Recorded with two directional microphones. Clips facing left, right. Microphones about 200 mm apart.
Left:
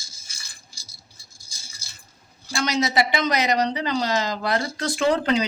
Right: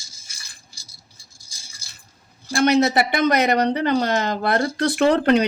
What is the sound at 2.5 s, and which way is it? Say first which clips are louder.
Speech: right 6 dB; 55° right (ahead or behind).